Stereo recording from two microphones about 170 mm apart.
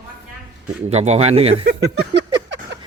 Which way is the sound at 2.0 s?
90° right.